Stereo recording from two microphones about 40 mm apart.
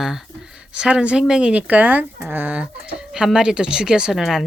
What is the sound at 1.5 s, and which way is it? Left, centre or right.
Speech, right.